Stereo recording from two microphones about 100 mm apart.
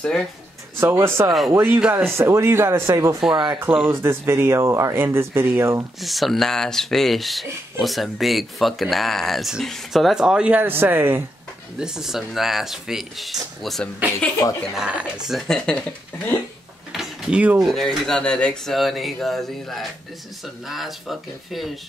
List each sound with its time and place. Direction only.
0.7 s speech: 25° right (ahead or behind)
2.1 s speech: 25° right (ahead or behind)
3.5 s speech: 20° right (ahead or behind)
5.9 s speech: centre (ahead or behind); by 11.2 s 20° right (ahead or behind)
11.8 s speech: 5° right (ahead or behind)
14.4 s speech: 35° left (ahead or behind)
14.8 s speech: 10° right (ahead or behind)
15.3 s speech: 5° left (ahead or behind)
16.9 s drawer open or close: 10° right (ahead or behind)
17.6 s speech: centre (ahead or behind)